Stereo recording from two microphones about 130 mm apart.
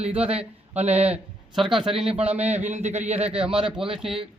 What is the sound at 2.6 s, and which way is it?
A man's voice, 60° right (ahead or behind).